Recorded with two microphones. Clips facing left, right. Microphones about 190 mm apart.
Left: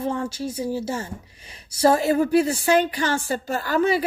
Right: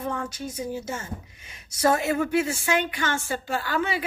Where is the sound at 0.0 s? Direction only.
30° left (ahead or behind).